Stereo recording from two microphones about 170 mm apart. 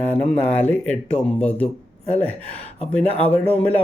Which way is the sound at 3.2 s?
10° left (ahead or behind).